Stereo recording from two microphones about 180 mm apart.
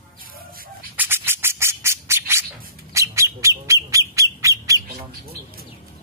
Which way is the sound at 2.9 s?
15° right (ahead or behind).